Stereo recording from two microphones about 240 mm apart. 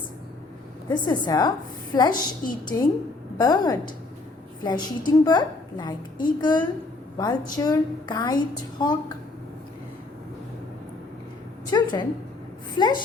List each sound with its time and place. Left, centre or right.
0.9 s a woman's voice: centre
2.1 s a woman's voice: left
2.6 s a woman's voice: centre
11.7 s a woman's voice: centre